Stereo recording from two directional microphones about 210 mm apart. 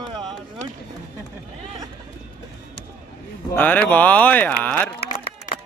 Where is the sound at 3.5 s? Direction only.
5° left (ahead or behind).